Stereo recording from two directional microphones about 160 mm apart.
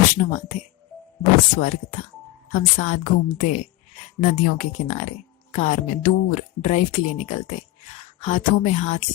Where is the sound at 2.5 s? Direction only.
50° left (ahead or behind).